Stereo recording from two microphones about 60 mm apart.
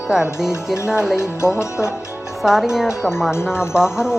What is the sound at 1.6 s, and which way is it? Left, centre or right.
Speech, left.